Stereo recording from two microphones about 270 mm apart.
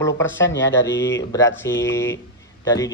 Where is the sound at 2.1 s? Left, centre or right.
Centre.